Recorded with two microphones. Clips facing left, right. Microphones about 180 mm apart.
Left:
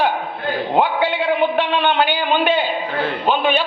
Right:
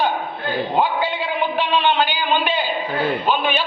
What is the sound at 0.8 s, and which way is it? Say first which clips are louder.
A man's voice: left 4 dB; 65° left (ahead or behind).